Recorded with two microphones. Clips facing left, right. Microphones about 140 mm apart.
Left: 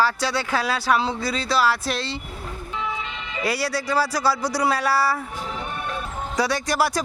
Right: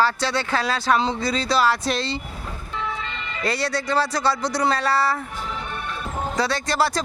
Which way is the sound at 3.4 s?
10° left (ahead or behind).